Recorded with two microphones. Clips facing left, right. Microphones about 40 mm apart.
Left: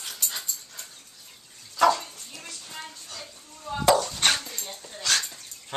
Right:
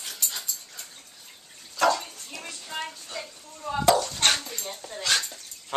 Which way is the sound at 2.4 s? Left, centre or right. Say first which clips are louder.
Right 6 dB; right.